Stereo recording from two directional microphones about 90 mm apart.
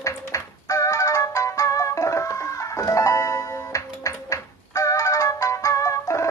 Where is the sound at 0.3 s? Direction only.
35° left (ahead or behind).